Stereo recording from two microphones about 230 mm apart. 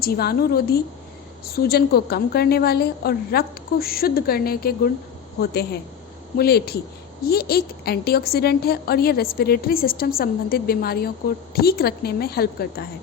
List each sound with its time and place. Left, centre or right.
0.0 s a woman's voice: left